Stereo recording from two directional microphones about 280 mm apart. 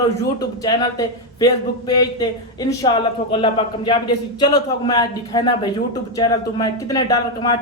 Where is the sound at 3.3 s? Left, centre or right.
Centre.